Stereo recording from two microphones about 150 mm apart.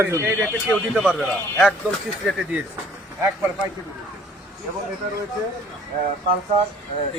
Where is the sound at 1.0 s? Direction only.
Centre (ahead or behind).